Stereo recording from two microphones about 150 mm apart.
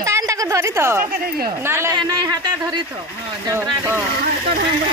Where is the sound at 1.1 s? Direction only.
75° right (ahead or behind).